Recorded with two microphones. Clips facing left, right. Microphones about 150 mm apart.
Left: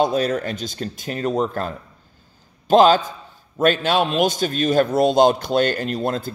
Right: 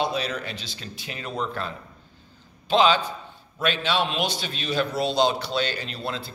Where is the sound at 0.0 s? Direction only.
45° left (ahead or behind).